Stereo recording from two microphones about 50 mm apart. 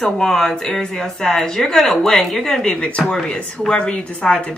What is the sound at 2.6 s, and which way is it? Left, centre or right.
Speech, left.